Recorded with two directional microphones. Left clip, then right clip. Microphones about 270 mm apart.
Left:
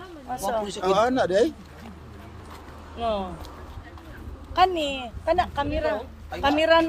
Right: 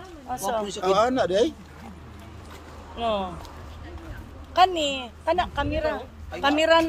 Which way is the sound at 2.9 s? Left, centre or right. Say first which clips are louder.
Right 1 dB; centre.